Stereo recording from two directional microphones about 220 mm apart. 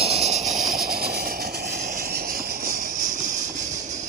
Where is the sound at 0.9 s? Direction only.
45° right (ahead or behind).